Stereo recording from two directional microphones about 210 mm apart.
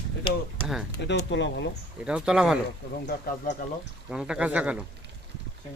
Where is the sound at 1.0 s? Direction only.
60° left (ahead or behind).